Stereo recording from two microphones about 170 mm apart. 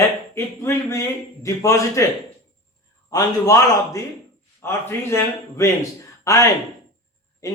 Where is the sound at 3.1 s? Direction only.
20° left (ahead or behind).